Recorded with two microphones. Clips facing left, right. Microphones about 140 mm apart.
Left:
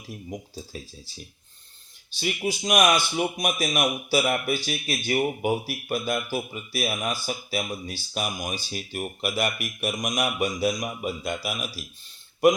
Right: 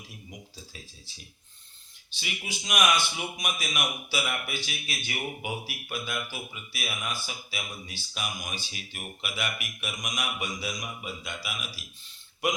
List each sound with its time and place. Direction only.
0.1 s speech: 40° left (ahead or behind)
2.2 s speech: 40° left (ahead or behind)